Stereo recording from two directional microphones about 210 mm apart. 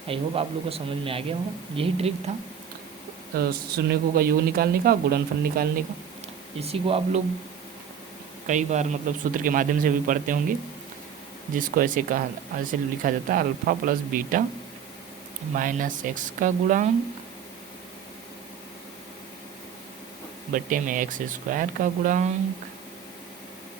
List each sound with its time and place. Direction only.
0.1 s speech: 25° right (ahead or behind)
3.3 s speech: 50° right (ahead or behind)
6.6 s speech: 30° right (ahead or behind)
8.4 s speech: 35° right (ahead or behind)
11.5 s speech: 40° right (ahead or behind)
15.5 s speech: 40° right (ahead or behind)
20.5 s speech: 40° right (ahead or behind)